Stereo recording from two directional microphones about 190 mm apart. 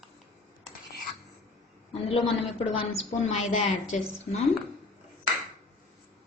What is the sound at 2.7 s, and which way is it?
Speech, 30° left (ahead or behind).